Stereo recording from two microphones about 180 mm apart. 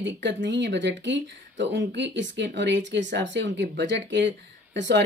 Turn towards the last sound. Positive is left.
turn(degrees=-80)